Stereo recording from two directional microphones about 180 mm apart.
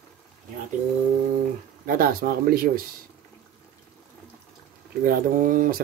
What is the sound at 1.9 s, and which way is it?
Speech, 55° right (ahead or behind).